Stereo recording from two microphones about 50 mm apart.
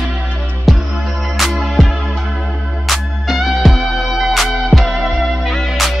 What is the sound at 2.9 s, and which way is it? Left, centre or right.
Music, centre.